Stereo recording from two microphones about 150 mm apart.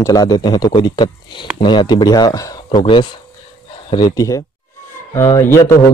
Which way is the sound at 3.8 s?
25° left (ahead or behind).